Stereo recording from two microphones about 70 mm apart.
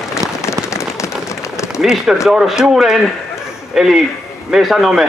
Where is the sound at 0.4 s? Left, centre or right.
Left.